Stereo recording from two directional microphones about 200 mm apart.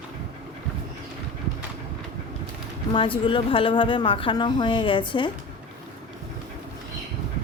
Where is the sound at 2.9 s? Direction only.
25° left (ahead or behind).